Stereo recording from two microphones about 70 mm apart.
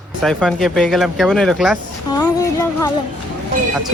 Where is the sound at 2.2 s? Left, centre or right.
Left.